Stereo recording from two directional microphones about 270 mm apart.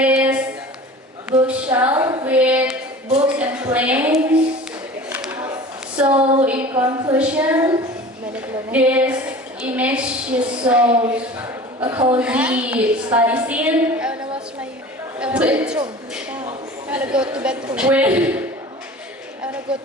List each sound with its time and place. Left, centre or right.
0.0 s a sound: centre
3.3 s a woman's voice: centre
5.0 s a sound: centre
6.0 s a woman's voice: centre
12.1 s a woman's voice: centre
15.2 s a man's voice: centre
16.9 s a woman's voice: centre